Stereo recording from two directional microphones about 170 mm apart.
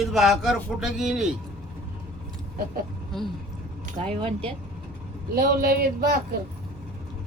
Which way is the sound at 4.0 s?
35° right (ahead or behind).